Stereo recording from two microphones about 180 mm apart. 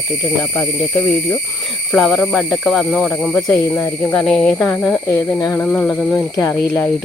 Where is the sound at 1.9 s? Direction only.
Centre (ahead or behind); by 5.6 s 20° left (ahead or behind).